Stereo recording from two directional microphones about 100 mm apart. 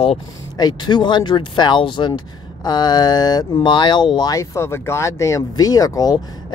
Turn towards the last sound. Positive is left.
turn(degrees=40)  # may be behind; listen again after turning